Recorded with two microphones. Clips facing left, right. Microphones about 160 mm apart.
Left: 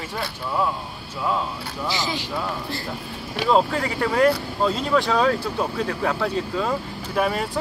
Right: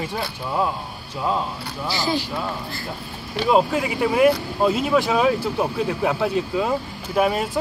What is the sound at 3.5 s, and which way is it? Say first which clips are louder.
Speech: right 1 dB; 10° right (ahead or behind).